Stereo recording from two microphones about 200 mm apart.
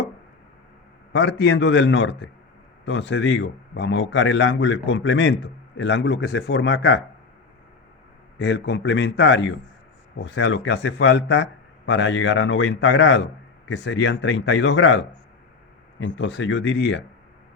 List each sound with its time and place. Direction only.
1.1 s a man's voice: 65° left (ahead or behind)
8.4 s a man's voice: 60° left (ahead or behind)